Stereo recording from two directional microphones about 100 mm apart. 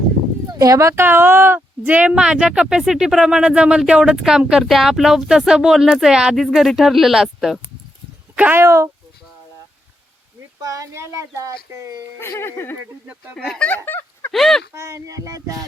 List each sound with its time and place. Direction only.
0.6 s speech: 35° right (ahead or behind); by 7.6 s 5° right (ahead or behind)
8.4 s speech: 15° right (ahead or behind)
8.6 s speech: 30° right (ahead or behind)
10.6 s speech: 35° right (ahead or behind)
12.4 s speech: 25° left (ahead or behind)
13.3 s speech: 5° left (ahead or behind)
14.3 s speech: centre (ahead or behind)
14.7 s speech: 30° right (ahead or behind)